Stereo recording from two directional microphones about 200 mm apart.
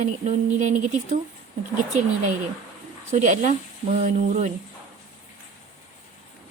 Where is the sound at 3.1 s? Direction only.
40° right (ahead or behind).